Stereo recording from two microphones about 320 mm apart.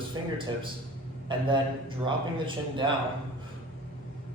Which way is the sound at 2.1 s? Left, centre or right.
Centre.